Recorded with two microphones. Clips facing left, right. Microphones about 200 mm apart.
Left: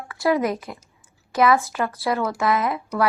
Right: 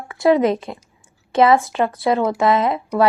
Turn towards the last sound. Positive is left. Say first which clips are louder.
# right 5 dB
turn(degrees=-25)  # may be behind; listen again after turning